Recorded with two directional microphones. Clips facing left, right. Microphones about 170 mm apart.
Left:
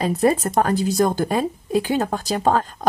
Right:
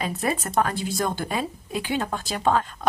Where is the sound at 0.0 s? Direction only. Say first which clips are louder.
Left 8 dB; 35° left (ahead or behind).